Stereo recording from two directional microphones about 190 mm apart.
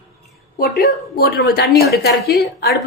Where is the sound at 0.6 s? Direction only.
55° left (ahead or behind).